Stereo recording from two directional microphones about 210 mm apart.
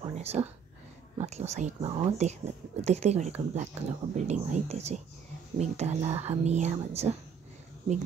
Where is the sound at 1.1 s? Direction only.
30° right (ahead or behind).